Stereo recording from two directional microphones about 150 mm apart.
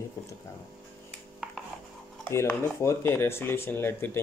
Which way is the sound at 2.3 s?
20° left (ahead or behind).